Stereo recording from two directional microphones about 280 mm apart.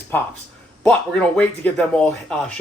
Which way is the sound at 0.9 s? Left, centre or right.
Centre.